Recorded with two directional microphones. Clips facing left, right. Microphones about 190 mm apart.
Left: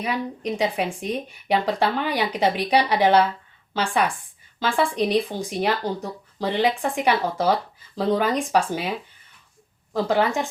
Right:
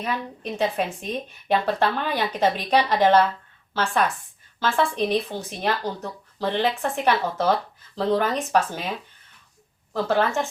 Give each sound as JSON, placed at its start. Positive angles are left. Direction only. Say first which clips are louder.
{"t": 0.0, "sound": "a woman's voice", "louder": "left 3 dB", "side_deg": 15}
{"t": 9.9, "sound": "a woman's voice", "louder": "left 1 dB", "side_deg": 15}